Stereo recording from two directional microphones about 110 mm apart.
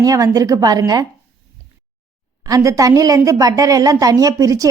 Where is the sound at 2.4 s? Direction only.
30° right (ahead or behind).